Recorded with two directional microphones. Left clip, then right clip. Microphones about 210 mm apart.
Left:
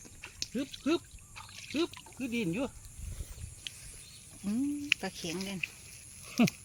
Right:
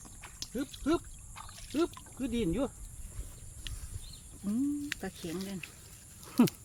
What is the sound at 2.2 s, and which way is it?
Speech, 20° right (ahead or behind).